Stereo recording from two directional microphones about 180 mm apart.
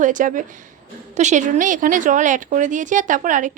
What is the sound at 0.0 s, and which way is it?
Speech, 45° right (ahead or behind).